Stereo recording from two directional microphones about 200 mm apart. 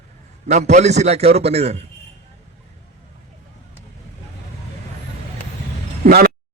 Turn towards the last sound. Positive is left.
turn(degrees=-50)  # may be behind; listen again after turning